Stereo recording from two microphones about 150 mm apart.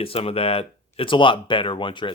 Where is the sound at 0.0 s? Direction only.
40° left (ahead or behind).